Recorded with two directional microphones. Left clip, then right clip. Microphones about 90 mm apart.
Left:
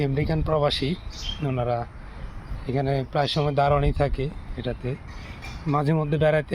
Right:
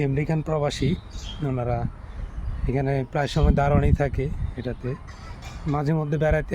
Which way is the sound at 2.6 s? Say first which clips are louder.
Even; 45° right (ahead or behind).